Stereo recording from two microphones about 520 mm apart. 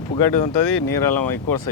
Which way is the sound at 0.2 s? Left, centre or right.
Left.